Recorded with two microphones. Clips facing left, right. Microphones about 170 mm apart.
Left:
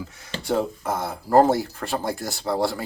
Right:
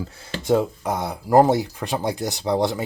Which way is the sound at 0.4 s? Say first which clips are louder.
Right 4 dB; 15° right (ahead or behind).